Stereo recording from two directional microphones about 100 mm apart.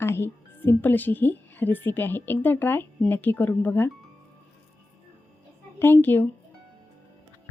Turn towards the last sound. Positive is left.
turn(degrees=20)  # may be behind; listen again after turning